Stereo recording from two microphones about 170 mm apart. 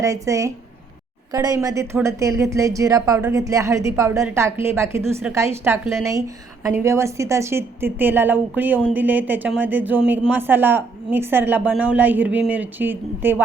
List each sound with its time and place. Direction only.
0.0 s a woman's voice: 20° right (ahead or behind)